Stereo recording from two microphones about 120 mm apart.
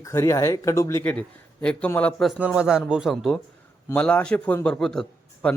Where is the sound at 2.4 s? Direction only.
5° right (ahead or behind).